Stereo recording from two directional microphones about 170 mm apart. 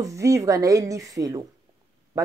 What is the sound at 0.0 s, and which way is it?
A woman's voice, 20° right (ahead or behind).